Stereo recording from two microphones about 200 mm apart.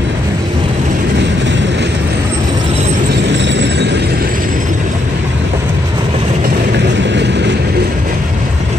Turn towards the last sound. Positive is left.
turn(degrees=-60)  # may be behind; listen again after turning